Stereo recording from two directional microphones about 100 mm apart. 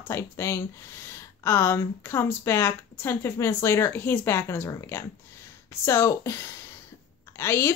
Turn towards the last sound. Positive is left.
turn(degrees=25)  # may be behind; listen again after turning